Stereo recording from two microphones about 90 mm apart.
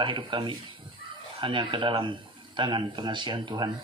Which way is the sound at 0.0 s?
65° right (ahead or behind).